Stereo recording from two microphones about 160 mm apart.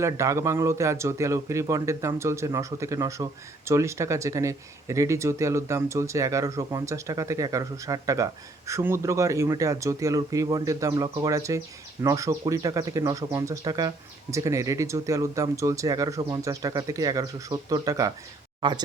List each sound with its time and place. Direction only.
0.0 s speech: 20° right (ahead or behind)